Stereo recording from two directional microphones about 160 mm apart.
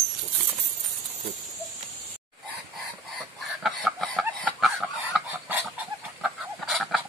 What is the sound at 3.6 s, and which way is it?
Chicken, centre (ahead or behind).